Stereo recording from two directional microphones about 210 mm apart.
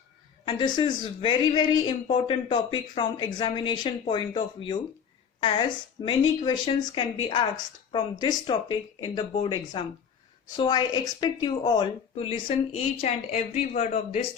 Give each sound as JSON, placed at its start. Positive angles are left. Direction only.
{"t": 0.4, "sound": "speech", "side_deg": 20}